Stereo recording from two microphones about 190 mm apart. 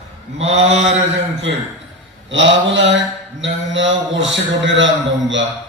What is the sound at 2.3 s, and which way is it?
A man's voice, 70° right (ahead or behind).